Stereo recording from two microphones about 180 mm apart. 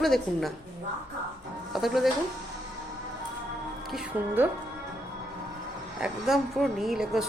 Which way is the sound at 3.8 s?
Centre (ahead or behind).